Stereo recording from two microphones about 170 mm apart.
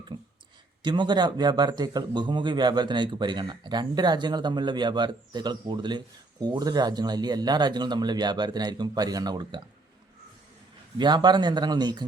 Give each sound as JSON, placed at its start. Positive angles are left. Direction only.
{"t": 0.1, "sound": "a sound", "side_deg": -30}
{"t": 0.8, "sound": "a man's voice", "side_deg": -25}
{"t": 10.9, "sound": "a man's voice", "side_deg": -25}